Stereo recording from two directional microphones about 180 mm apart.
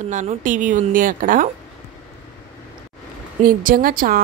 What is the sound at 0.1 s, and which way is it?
A woman's voice, 45° right (ahead or behind).